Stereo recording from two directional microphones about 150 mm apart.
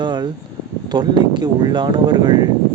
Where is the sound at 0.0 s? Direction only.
30° right (ahead or behind).